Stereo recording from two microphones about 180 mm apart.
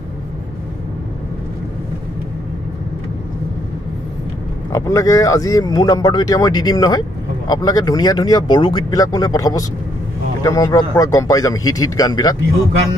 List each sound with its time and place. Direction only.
4.7 s speech: 20° left (ahead or behind)